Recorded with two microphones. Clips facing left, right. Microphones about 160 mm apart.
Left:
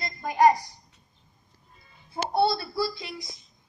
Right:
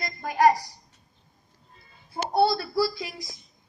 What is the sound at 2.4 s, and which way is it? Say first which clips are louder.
Speech: right 4 dB; 25° left (ahead or behind).